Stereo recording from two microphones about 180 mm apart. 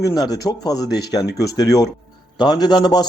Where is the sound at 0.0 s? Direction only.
20° left (ahead or behind).